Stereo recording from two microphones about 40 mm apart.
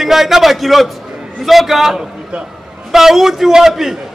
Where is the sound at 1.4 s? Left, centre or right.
Centre.